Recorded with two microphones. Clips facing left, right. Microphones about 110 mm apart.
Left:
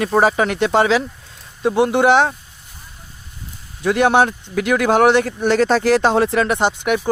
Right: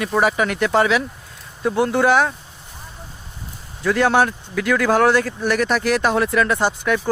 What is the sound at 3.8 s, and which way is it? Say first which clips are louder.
Speech: left 2 dB; 20° left (ahead or behind).